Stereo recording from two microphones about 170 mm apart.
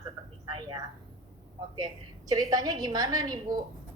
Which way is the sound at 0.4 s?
25° right (ahead or behind).